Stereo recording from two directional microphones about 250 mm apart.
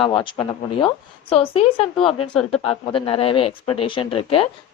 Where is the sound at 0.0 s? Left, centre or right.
Centre.